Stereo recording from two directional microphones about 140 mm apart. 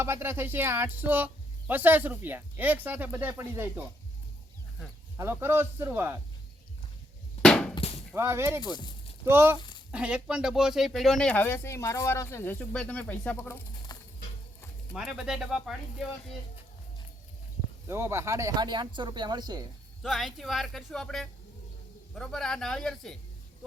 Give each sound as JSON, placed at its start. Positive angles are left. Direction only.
{"t": 0.0, "sound": "speech", "side_deg": -15}
{"t": 5.1, "sound": "speech", "side_deg": -15}
{"t": 7.4, "sound": "a sound", "side_deg": 5}
{"t": 7.8, "sound": "a sound", "side_deg": 45}
{"t": 8.1, "sound": "speech", "side_deg": -20}
{"t": 8.6, "sound": "speech", "side_deg": 30}
{"t": 9.2, "sound": "speech", "side_deg": -15}
{"t": 14.9, "sound": "speech", "side_deg": -5}
{"t": 17.8, "sound": "speech", "side_deg": -20}
{"t": 20.0, "sound": "speech", "side_deg": 0}